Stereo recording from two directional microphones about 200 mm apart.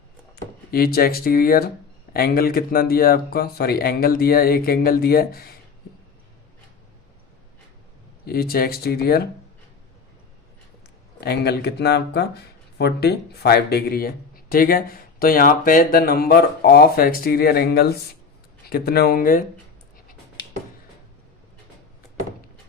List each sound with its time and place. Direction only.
0.7 s speech: 50° left (ahead or behind)
8.2 s speech: 50° left (ahead or behind)
11.2 s speech: 55° left (ahead or behind)